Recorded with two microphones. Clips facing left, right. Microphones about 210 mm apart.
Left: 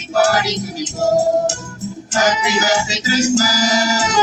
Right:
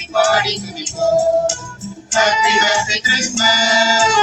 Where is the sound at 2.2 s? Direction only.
40° left (ahead or behind).